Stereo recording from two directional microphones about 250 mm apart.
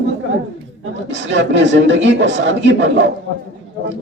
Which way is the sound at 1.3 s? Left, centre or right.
Right.